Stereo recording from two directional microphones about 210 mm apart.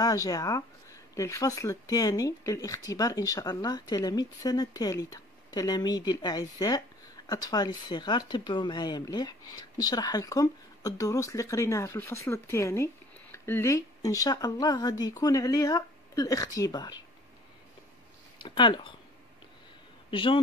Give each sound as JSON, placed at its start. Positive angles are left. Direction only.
{"t": 0.0, "sound": "speech", "side_deg": 15}
{"t": 18.4, "sound": "speech", "side_deg": 20}
{"t": 20.1, "sound": "speech", "side_deg": 25}